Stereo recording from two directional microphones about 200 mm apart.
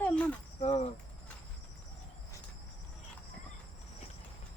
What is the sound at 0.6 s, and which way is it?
Speech, 30° left (ahead or behind).